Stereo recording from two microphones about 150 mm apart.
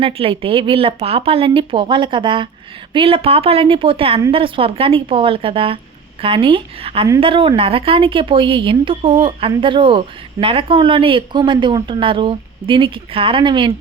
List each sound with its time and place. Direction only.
0.0 s speech: 40° right (ahead or behind)